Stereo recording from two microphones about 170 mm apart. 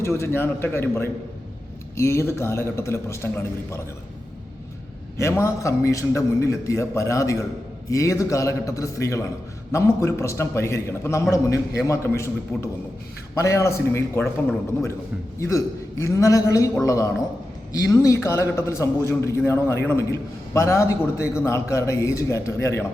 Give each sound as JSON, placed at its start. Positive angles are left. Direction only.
{"t": 0.0, "sound": "a man's voice", "side_deg": 15}
{"t": 5.1, "sound": "a man's voice", "side_deg": 15}
{"t": 13.3, "sound": "a man's voice", "side_deg": 15}